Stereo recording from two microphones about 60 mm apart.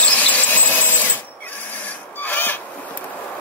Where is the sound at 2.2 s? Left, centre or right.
Left.